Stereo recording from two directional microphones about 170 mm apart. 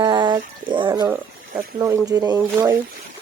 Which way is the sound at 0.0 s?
25° right (ahead or behind).